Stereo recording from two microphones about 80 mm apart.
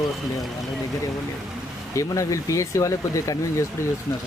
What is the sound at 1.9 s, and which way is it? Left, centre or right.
Speech, left.